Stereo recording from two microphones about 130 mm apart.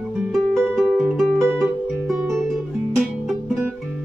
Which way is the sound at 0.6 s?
20° right (ahead or behind).